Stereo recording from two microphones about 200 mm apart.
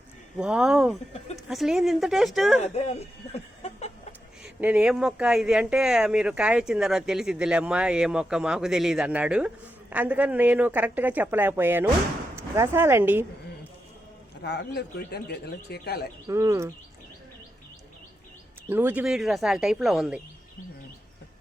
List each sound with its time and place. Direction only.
0.3 s speech: 5° right (ahead or behind)
2.6 s speech: 35° left (ahead or behind)
4.4 s speech: 5° right (ahead or behind)
14.4 s speech: 55° left (ahead or behind)
16.2 s speech: 15° right (ahead or behind)
18.7 s speech: 10° right (ahead or behind)